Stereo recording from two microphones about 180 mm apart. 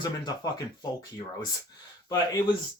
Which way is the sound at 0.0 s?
20° left (ahead or behind).